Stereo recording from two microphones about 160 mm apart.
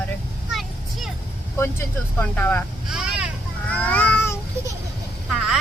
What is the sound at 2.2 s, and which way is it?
Speech, 10° left (ahead or behind).